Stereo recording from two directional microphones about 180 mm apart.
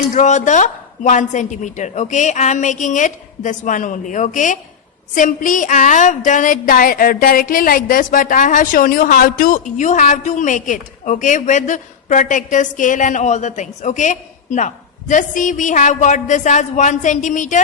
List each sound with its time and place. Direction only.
0.1 s a woman's voice: 40° left (ahead or behind)